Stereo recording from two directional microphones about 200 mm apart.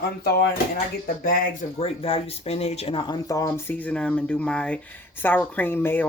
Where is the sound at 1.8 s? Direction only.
30° left (ahead or behind).